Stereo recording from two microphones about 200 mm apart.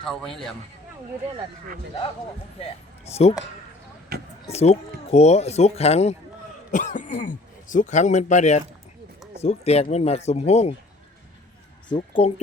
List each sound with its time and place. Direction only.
0.0 s a man's voice: 5° left (ahead or behind)
3.1 s speech: 30° left (ahead or behind)
4.1 s a sound: 50° right (ahead or behind)
4.5 s speech: 35° left (ahead or behind)
11.9 s a woman's voice: 25° left (ahead or behind)